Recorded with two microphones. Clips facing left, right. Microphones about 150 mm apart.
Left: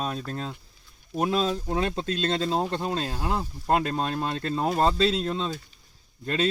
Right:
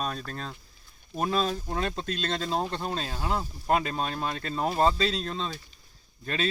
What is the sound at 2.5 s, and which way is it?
Speech, 15° left (ahead or behind).